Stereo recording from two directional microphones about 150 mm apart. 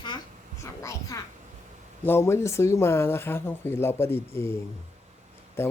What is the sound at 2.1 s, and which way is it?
A child's voice, 15° left (ahead or behind).